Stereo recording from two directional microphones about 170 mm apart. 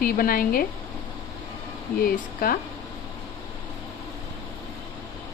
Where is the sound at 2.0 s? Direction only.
60° left (ahead or behind).